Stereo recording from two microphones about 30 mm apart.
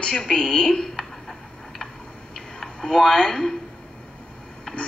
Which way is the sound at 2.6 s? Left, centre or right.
Centre.